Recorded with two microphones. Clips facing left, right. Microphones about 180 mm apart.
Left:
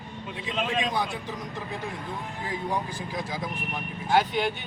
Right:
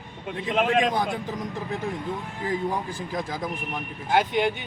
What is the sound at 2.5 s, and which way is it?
Speech, 50° right (ahead or behind).